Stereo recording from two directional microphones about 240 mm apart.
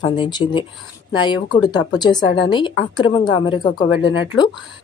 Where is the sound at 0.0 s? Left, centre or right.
Centre.